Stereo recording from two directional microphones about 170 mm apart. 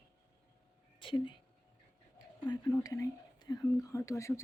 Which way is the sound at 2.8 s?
20° left (ahead or behind).